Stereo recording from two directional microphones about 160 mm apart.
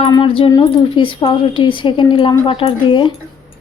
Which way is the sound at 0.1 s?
30° left (ahead or behind).